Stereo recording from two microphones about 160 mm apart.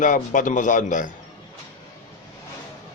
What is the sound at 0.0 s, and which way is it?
Speech, 55° left (ahead or behind).